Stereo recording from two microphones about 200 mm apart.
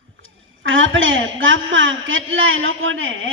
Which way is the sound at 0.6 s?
75° right (ahead or behind).